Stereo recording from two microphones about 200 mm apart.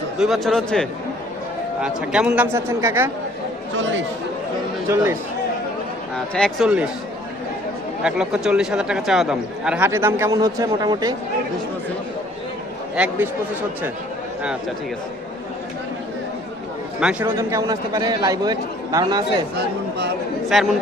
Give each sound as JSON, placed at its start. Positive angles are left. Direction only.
{"t": 0.2, "sound": "a man's voice", "side_deg": 0}
{"t": 3.8, "sound": "speech", "side_deg": -70}
{"t": 6.1, "sound": "speech", "side_deg": 5}
{"t": 8.0, "sound": "speech", "side_deg": -5}
{"t": 13.0, "sound": "a man's voice", "side_deg": -10}
{"t": 17.0, "sound": "a man's voice", "side_deg": -5}
{"t": 20.5, "sound": "speech", "side_deg": 0}